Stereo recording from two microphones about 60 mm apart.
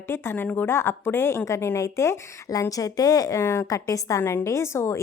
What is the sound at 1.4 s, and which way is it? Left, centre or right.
Speech, left.